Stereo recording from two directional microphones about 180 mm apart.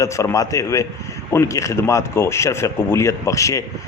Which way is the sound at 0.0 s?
15° left (ahead or behind).